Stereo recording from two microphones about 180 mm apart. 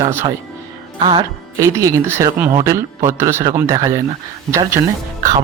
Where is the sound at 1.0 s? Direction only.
25° right (ahead or behind).